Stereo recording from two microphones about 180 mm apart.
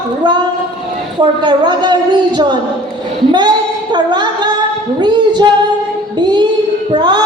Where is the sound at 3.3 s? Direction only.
25° right (ahead or behind).